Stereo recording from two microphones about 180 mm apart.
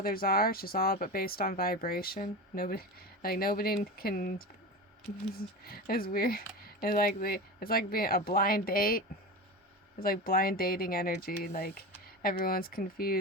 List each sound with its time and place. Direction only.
0.0 s speech: 55° left (ahead or behind)